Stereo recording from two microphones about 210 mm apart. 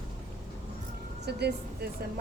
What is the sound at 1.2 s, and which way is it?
Speech, 50° right (ahead or behind).